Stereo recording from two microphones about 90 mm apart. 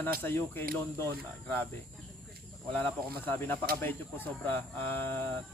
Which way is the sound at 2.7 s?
20° left (ahead or behind).